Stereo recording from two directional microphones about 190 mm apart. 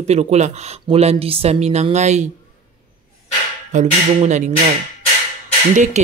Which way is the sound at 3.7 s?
40° right (ahead or behind).